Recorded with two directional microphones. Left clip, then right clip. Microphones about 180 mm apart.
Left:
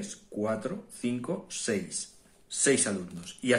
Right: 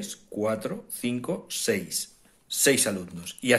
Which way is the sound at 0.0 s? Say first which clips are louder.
Right 4 dB; 30° right (ahead or behind).